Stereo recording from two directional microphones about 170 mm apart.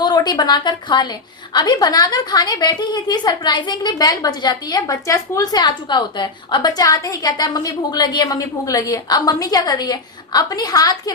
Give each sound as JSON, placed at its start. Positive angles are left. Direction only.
{"t": 0.0, "sound": "a woman's voice", "side_deg": 25}